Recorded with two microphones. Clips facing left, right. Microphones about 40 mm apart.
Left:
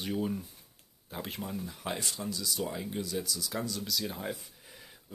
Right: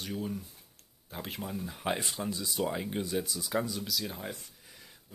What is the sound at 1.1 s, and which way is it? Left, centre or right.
Speech, centre.